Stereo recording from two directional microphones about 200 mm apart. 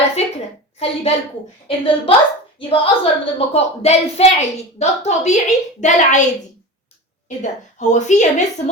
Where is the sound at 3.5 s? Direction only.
30° left (ahead or behind).